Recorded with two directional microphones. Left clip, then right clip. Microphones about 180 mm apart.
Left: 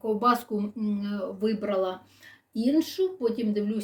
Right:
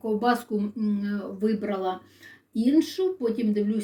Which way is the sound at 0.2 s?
30° left (ahead or behind).